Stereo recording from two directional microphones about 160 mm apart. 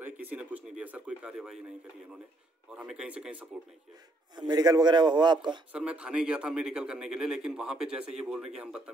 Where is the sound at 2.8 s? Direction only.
5° right (ahead or behind).